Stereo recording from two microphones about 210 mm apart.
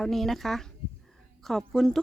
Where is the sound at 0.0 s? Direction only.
Centre (ahead or behind).